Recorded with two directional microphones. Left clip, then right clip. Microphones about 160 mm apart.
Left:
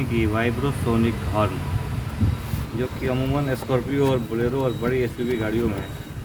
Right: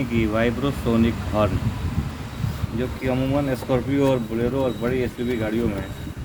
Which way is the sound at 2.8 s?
15° right (ahead or behind).